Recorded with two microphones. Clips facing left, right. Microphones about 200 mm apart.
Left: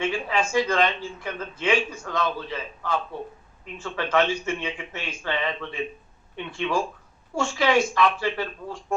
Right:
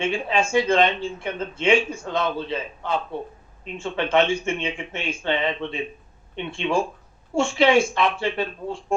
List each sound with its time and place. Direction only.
0.0 s speech: 25° right (ahead or behind)